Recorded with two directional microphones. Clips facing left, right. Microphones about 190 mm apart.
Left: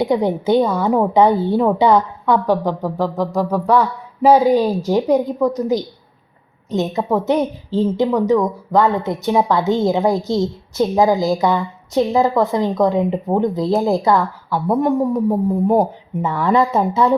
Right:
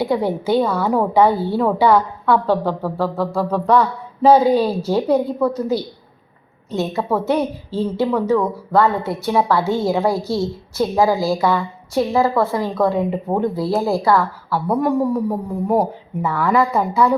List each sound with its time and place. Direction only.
0.0 s a woman's voice: 20° left (ahead or behind)
15.8 s speech: 20° left (ahead or behind)